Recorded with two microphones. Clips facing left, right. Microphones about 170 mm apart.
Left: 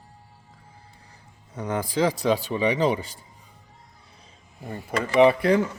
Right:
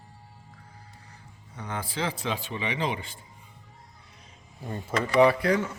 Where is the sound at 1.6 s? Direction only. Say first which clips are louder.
Left 8 dB; 45° left (ahead or behind).